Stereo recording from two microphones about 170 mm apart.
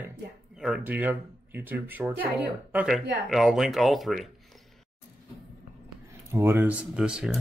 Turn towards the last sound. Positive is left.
turn(degrees=-5)  # may be behind; listen again after turning